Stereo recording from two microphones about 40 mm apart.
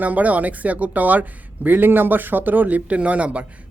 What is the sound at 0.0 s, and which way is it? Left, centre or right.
A man's voice, right.